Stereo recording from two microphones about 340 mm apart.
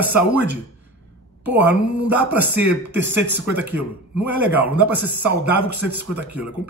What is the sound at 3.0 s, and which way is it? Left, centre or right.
Speech, right.